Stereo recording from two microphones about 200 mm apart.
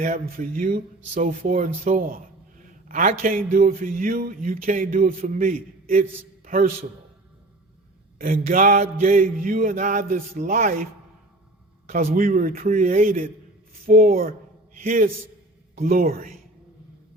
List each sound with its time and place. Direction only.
0.0 s a man's voice: 45° right (ahead or behind)
8.2 s mantra: 45° right (ahead or behind)
11.9 s mantra: 45° right (ahead or behind)
13.8 s a man's voice: 45° right (ahead or behind)